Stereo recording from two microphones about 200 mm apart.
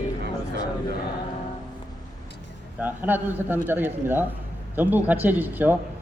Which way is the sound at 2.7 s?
10° right (ahead or behind).